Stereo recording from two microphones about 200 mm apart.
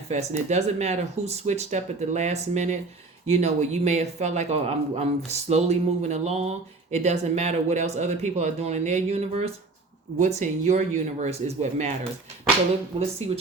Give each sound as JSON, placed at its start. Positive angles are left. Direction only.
{"t": 0.1, "sound": "speech", "side_deg": -35}
{"t": 13.0, "sound": "speech", "side_deg": -30}